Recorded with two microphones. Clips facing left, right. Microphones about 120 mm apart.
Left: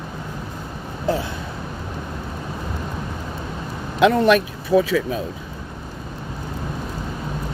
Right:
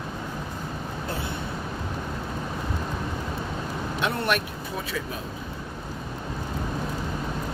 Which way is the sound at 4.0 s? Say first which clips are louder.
Left 13 dB; 90° left.